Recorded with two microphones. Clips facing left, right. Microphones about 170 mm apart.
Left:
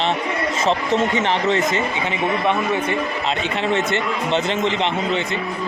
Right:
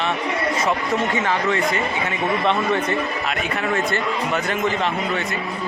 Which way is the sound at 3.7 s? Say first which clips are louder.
Left 1 dB; 25° left (ahead or behind).